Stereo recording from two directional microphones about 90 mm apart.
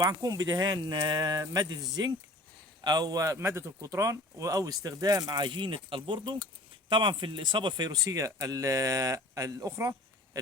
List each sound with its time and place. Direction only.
0.0 s speech: 45° right (ahead or behind)